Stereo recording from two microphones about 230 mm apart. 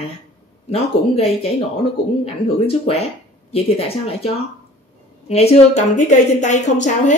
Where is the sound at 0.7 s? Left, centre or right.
Left.